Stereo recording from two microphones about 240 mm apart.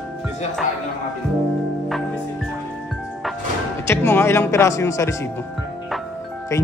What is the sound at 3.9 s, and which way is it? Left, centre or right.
Speech, centre.